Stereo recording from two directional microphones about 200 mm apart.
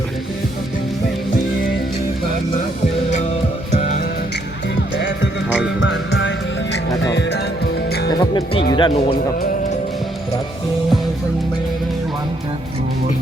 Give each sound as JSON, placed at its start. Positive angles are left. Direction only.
{"t": 3.7, "sound": "music", "side_deg": 35}
{"t": 4.9, "sound": "music", "side_deg": 65}
{"t": 8.2, "sound": "music", "side_deg": 20}
{"t": 8.7, "sound": "speech", "side_deg": 25}